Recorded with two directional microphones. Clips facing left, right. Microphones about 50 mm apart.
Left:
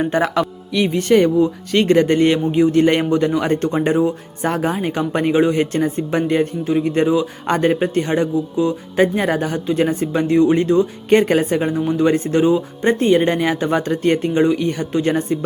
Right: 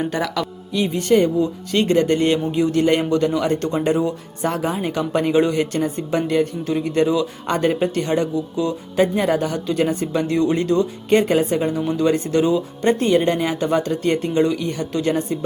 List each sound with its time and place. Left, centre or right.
0.0 s speech: left
0.7 s speech: left
6.7 s speech: left
10.2 s speech: left
11.1 s speech: left